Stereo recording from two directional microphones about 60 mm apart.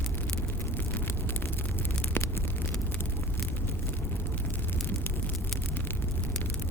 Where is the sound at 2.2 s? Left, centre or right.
Left.